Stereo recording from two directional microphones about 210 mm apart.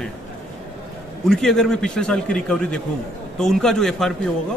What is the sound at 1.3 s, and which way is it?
A man's voice, centre (ahead or behind).